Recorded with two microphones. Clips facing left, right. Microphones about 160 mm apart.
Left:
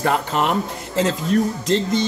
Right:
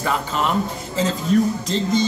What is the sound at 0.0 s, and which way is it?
Speech, 60° left (ahead or behind).